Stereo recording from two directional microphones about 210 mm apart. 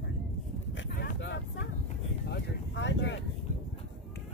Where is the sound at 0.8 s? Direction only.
55° left (ahead or behind).